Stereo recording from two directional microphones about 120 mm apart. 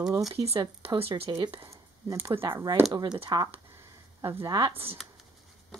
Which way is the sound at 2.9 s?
35° right (ahead or behind).